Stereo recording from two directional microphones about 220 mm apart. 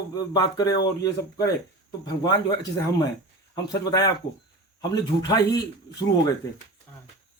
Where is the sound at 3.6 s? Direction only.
15° left (ahead or behind).